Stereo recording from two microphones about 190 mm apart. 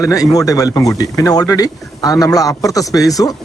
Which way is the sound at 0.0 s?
20° left (ahead or behind).